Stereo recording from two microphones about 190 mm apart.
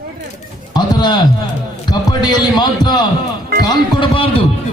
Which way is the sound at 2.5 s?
20° left (ahead or behind).